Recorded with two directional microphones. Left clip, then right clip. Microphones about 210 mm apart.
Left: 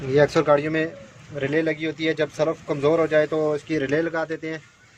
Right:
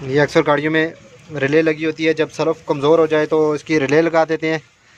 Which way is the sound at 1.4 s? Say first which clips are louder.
Right 7 dB; 55° right (ahead or behind).